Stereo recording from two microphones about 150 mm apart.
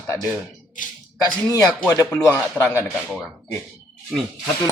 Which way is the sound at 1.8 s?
15° left (ahead or behind).